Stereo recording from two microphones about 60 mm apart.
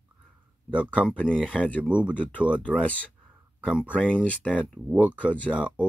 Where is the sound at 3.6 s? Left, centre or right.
Centre.